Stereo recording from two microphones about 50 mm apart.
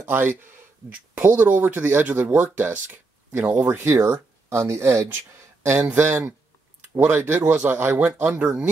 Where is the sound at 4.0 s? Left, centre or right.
Right.